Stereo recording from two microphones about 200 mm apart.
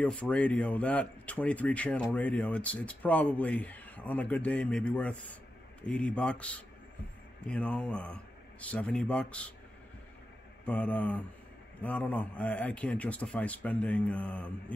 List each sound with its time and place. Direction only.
0.0 s speech: 5° left (ahead or behind)
10.6 s speech: 5° left (ahead or behind)